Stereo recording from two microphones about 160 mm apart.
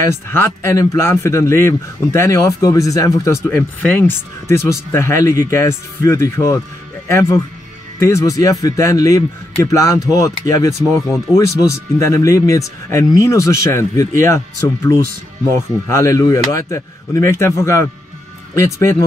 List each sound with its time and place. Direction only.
0.0 s speech: 15° left (ahead or behind)